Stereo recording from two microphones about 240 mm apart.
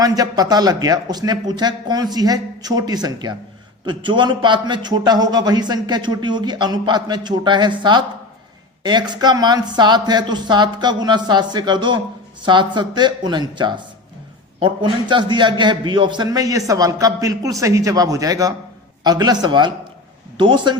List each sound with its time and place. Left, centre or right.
0.0 s a man's voice: centre